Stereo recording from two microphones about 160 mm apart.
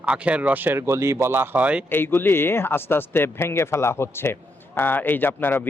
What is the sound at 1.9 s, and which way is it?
Speech, 15° left (ahead or behind).